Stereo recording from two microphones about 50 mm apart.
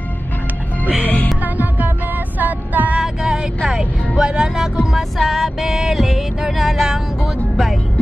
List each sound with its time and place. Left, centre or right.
1.0 s music: left
1.4 s music: right
3.0 s vehicle: centre
4.2 s speech: centre
4.9 s music: centre